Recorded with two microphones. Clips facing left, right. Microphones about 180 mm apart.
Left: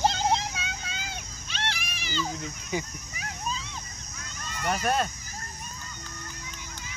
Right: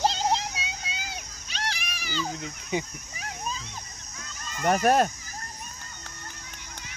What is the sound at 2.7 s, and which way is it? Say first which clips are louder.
Speech: right 2 dB; 25° right (ahead or behind).